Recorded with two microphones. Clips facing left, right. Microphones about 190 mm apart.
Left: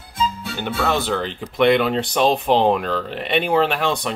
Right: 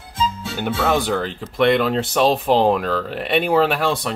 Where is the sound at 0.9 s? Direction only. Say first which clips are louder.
Right 2 dB; 15° right (ahead or behind).